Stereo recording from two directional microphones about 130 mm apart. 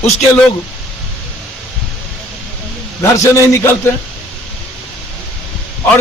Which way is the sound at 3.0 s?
20° left (ahead or behind).